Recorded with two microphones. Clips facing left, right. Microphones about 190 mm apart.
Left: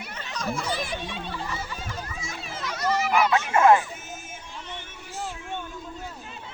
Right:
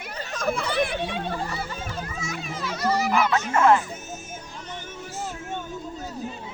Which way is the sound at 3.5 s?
15° left (ahead or behind).